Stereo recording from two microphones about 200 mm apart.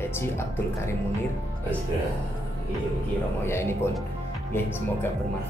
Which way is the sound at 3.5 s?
10° left (ahead or behind).